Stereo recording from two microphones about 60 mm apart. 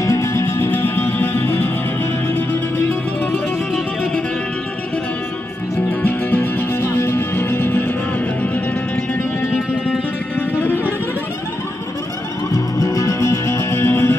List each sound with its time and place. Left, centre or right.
0.0 s music: left
0.7 s music: left
5.8 s music: left
10.3 s music: left
12.5 s music: left